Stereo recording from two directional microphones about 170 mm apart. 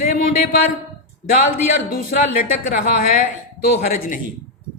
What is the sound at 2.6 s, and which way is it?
A man's voice, 50° left (ahead or behind).